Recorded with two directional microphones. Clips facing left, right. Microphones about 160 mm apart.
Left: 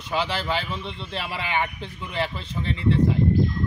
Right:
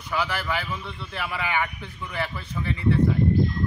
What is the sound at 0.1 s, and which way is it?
A man's voice, 25° left (ahead or behind).